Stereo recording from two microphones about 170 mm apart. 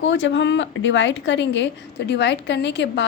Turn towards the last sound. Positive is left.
turn(degrees=90)